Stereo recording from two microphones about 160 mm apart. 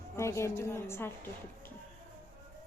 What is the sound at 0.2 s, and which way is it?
A woman's voice, 15° left (ahead or behind).